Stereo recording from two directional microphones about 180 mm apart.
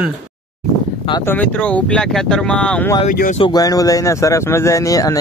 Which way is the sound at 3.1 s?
45° left (ahead or behind).